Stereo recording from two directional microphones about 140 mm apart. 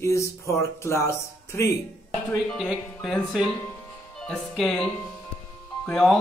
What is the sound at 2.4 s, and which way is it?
Speech, centre (ahead or behind).